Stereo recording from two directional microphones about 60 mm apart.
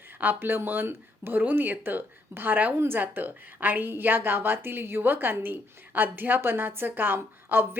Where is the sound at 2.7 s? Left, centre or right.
Right.